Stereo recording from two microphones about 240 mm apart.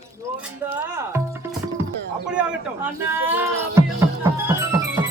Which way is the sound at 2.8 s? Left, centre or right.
Centre.